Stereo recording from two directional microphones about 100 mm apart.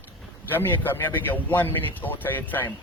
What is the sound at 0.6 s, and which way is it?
A man's voice, 20° left (ahead or behind).